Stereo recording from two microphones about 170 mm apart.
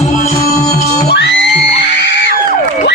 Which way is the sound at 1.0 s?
80° left.